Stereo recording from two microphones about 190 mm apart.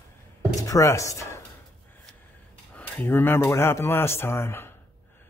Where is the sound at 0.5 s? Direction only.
15° left (ahead or behind).